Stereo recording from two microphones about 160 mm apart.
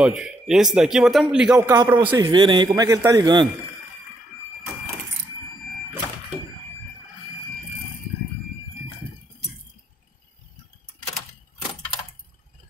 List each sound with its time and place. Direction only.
0.0 s a man's voice: 5° right (ahead or behind)
1.9 s speech: 20° right (ahead or behind)
2.3 s a man's voice: 30° right (ahead or behind)